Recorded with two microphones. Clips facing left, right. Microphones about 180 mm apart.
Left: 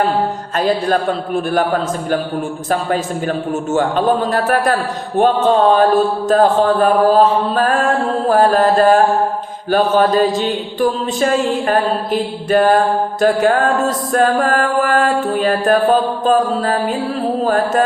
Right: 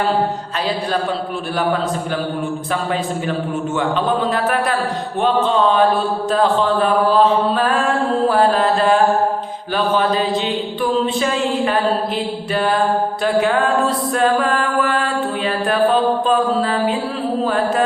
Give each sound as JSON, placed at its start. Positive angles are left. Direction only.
{"t": 0.6, "sound": "a man's voice", "side_deg": 45}
{"t": 3.8, "sound": "a man's voice", "side_deg": 45}
{"t": 8.3, "sound": "a sound", "side_deg": 45}
{"t": 9.7, "sound": "a man's voice", "side_deg": 45}